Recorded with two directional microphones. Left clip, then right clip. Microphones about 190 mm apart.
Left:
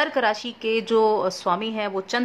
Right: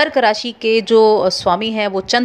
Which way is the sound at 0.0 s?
20° right (ahead or behind).